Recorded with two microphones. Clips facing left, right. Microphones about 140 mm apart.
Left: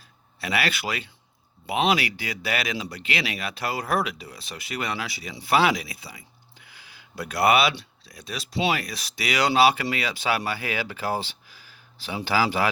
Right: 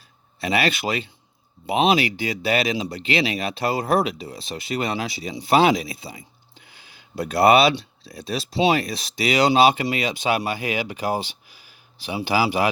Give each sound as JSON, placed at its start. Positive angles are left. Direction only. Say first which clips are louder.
{"t": 0.3, "sound": "speech", "louder": "right 5 dB", "side_deg": -25}